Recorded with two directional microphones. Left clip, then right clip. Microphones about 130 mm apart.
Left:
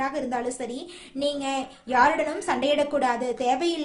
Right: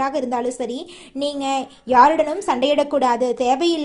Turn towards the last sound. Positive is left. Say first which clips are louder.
# right 6 dB
turn(degrees=-35)  # may be behind; listen again after turning